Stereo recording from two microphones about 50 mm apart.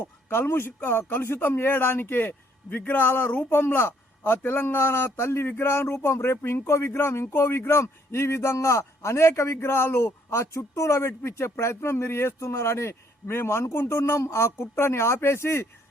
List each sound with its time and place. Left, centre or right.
0.0 s a man's voice: left